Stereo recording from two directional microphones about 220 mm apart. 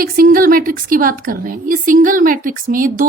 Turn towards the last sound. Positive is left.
turn(degrees=-40)  # may be behind; listen again after turning